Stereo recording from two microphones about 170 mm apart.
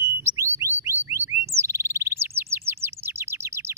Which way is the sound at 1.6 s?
15° right (ahead or behind).